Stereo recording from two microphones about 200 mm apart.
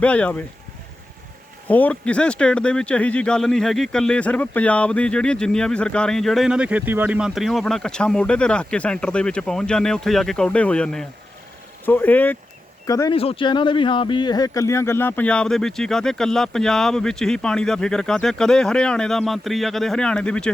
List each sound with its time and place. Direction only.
0.0 s speech: 5° left (ahead or behind)
1.6 s speech: 10° left (ahead or behind)
13.1 s speech: 25° left (ahead or behind); by 20.5 s 5° left (ahead or behind)